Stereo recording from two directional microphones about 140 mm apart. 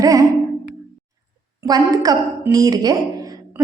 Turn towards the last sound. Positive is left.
turn(degrees=-25)  # may be behind; listen again after turning